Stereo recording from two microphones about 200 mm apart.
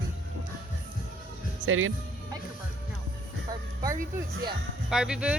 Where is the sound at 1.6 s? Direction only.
90° right.